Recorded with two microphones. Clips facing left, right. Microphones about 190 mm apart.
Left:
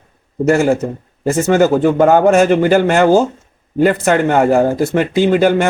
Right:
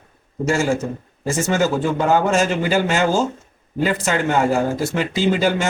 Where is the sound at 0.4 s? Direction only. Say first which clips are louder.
Left 7 dB; 60° left (ahead or behind).